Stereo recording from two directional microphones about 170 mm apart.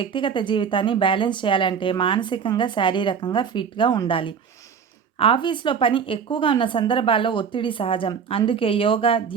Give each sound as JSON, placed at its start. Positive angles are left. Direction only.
{"t": 0.0, "sound": "speech", "side_deg": 30}